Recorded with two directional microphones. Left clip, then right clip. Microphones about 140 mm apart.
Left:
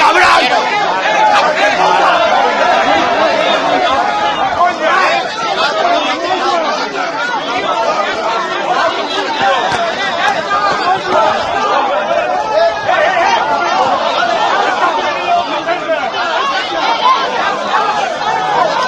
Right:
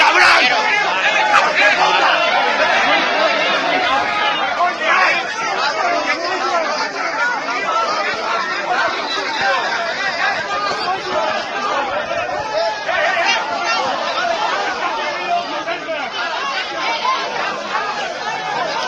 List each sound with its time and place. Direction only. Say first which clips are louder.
0.0 s chatter: left 3 dB; 30° right (ahead or behind)
3.2 s chatter: left 4 dB; centre (ahead or behind)